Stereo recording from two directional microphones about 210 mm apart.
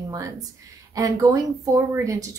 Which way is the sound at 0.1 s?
15° right (ahead or behind).